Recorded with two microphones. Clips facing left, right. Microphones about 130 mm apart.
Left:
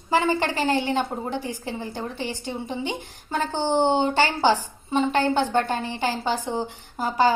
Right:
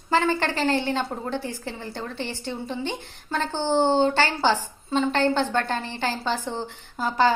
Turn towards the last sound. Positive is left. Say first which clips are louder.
# left 1 dB
turn(degrees=10)  # may be behind; listen again after turning